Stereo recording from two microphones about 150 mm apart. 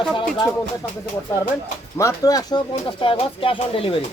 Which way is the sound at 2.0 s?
20° left (ahead or behind).